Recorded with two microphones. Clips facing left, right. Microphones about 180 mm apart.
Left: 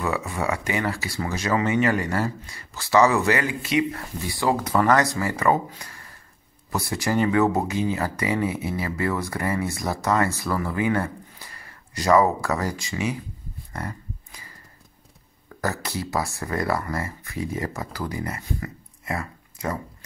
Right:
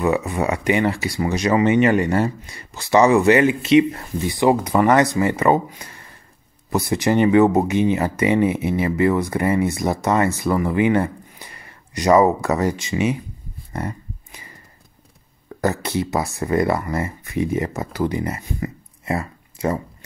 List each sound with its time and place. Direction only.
0.0 s speech: 20° right (ahead or behind)
13.7 s a sound: 25° right (ahead or behind)
15.6 s speech: 20° right (ahead or behind)